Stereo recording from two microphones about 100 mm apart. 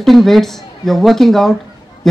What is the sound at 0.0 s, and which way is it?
Speech, centre (ahead or behind).